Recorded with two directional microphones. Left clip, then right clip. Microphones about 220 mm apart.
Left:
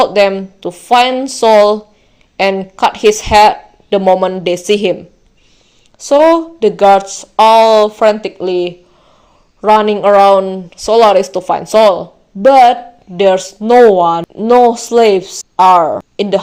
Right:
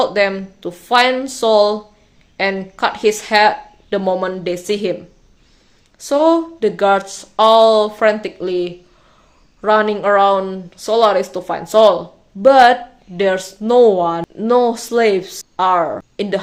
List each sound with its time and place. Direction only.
0.0 s speech: 25° left (ahead or behind)
6.0 s speech: 20° left (ahead or behind)